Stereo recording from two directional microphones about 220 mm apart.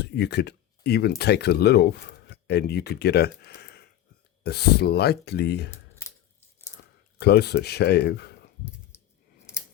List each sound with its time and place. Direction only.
0.0 s speech: 50° left (ahead or behind)
7.2 s speech: 50° left (ahead or behind)
8.9 s a sound: 10° left (ahead or behind)